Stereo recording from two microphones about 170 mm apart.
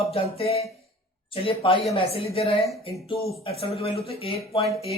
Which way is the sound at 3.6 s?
35° left (ahead or behind).